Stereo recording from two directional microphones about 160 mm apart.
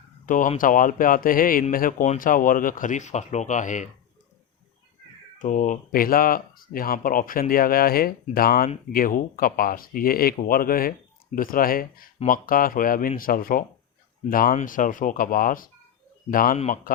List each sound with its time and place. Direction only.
0.3 s speech: 55° left (ahead or behind)
5.4 s speech: 55° left (ahead or behind)